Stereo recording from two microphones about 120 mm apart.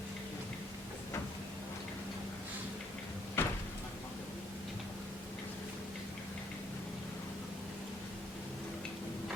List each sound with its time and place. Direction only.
3.4 s door: 20° left (ahead or behind)